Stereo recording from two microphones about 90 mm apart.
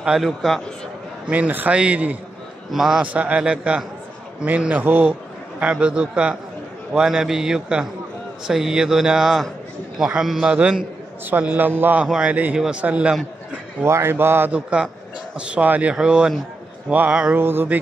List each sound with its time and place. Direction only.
0.0 s speech: 5° right (ahead or behind)
1.2 s speech: 15° right (ahead or behind)
2.7 s speech: 5° right (ahead or behind)
3.0 s speech: 15° right (ahead or behind)
11.2 s a man's voice: 20° right (ahead or behind)
13.8 s a man's voice: 30° right (ahead or behind)
14.5 s a man's voice: 15° right (ahead or behind)